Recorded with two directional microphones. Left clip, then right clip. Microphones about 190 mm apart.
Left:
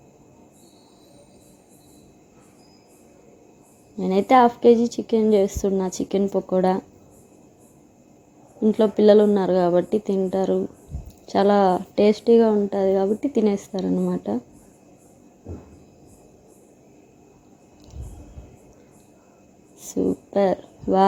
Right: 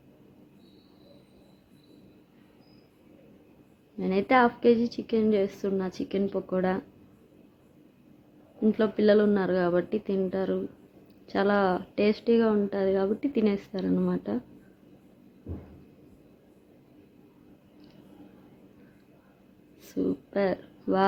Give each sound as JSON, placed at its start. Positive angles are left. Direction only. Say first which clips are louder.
{"t": 4.0, "sound": "speech", "louder": "left 7 dB", "side_deg": 20}
{"t": 8.7, "sound": "speech", "louder": "left 8 dB", "side_deg": 20}
{"t": 19.8, "sound": "a sound", "louder": "left 6 dB", "side_deg": 20}